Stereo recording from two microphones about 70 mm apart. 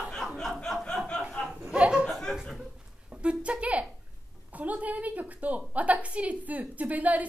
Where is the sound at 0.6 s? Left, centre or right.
Centre.